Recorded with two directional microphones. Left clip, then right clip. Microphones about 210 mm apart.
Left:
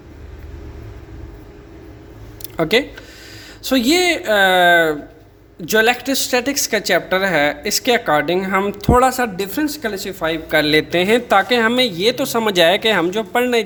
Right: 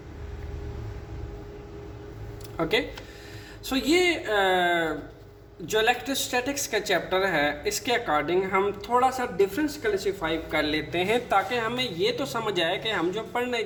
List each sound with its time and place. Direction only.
2.6 s a woman's voice: 45° left (ahead or behind)